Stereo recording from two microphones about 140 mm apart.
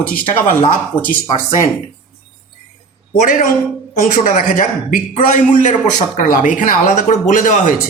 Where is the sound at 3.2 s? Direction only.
60° left (ahead or behind).